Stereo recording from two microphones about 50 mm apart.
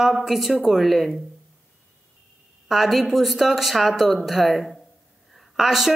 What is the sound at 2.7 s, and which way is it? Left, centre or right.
Speech, centre.